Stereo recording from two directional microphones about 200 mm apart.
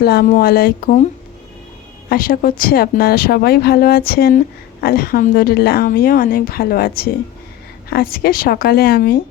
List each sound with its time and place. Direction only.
0.0 s a woman's voice: 55° left (ahead or behind)
2.0 s a woman's voice: 45° left (ahead or behind)